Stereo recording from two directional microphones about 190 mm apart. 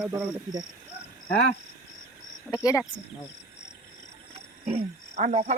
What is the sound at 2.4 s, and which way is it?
Speech, 20° left (ahead or behind).